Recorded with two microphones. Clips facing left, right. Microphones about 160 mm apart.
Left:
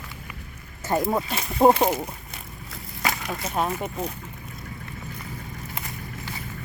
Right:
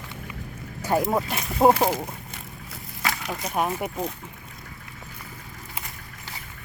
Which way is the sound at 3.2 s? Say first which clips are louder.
Right 2 dB; 5° right (ahead or behind).